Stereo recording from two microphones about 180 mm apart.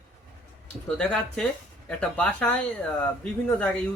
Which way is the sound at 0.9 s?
5° left (ahead or behind).